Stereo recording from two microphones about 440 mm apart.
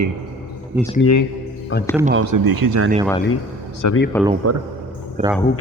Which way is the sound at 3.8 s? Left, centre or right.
Left.